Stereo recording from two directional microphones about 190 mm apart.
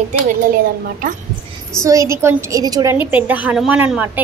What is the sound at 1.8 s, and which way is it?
A woman's voice, 15° right (ahead or behind).